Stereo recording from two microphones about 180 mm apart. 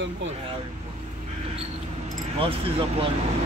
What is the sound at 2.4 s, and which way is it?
Speech, 30° right (ahead or behind).